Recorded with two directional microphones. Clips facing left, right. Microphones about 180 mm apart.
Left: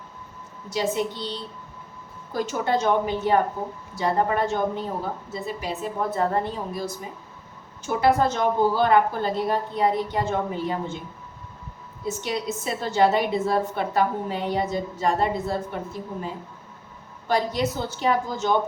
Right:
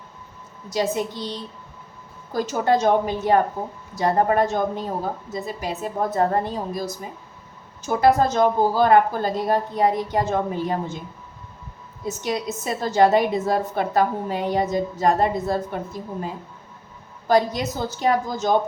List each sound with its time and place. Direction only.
0.7 s a woman's voice: 40° right (ahead or behind)
7.9 s a woman's voice: 40° right (ahead or behind)
12.0 s a woman's voice: 40° right (ahead or behind)